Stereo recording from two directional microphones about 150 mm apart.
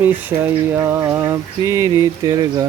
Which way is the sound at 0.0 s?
10° right (ahead or behind).